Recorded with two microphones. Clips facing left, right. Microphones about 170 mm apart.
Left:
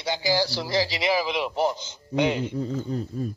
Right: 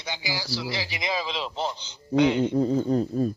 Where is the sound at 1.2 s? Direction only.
15° left (ahead or behind).